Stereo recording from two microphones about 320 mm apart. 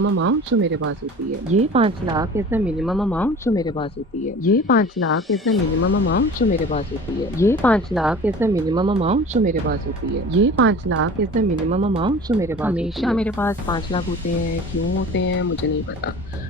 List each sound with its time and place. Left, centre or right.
0.0 s speech: right
1.5 s speech: centre
4.4 s speech: left
7.3 s speech: centre; by 9.7 s right
10.3 s speech: right
11.3 s speech: centre
15.1 s speech: left